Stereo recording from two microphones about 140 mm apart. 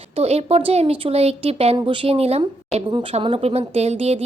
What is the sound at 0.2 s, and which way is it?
A woman's voice, 50° right (ahead or behind).